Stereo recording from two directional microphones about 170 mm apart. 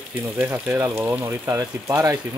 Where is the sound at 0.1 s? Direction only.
10° right (ahead or behind).